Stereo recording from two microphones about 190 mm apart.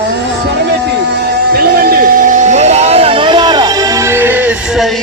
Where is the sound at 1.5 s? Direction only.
50° right (ahead or behind); by 3.7 s 20° right (ahead or behind).